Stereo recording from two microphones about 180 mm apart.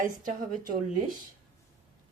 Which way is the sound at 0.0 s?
50° right (ahead or behind).